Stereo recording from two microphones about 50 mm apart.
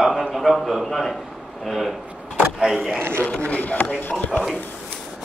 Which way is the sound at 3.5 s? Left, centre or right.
Left.